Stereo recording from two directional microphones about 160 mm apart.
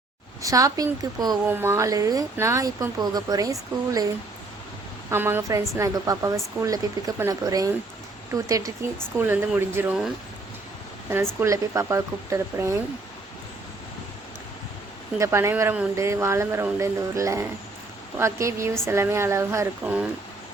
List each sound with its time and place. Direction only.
0.4 s speech: 20° right (ahead or behind)
5.1 s speech: 15° right (ahead or behind)
11.1 s speech: 15° right (ahead or behind)
15.2 s speech: 15° right (ahead or behind)